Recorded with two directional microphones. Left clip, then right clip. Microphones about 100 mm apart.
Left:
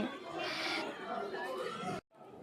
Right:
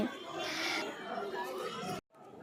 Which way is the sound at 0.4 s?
30° right (ahead or behind).